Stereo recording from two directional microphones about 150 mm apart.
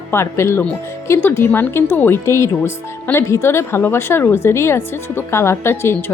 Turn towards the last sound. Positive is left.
turn(degrees=15)  # may be behind; listen again after turning